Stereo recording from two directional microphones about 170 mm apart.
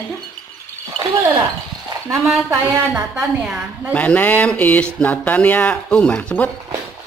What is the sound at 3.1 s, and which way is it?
Speech, 5° right (ahead or behind).